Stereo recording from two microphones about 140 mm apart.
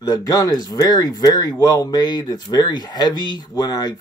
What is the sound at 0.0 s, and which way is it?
Speech, 25° left (ahead or behind).